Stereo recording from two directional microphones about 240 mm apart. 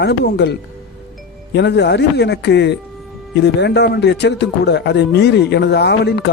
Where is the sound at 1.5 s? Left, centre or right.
Left.